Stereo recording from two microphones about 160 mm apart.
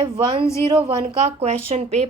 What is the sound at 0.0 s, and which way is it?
Speech, 30° right (ahead or behind).